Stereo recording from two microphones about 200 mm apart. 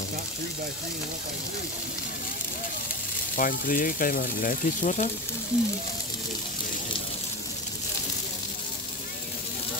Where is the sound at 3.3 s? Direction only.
45° left (ahead or behind).